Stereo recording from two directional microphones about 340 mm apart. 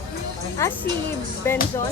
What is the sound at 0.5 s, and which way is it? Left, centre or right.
A woman's voice, centre.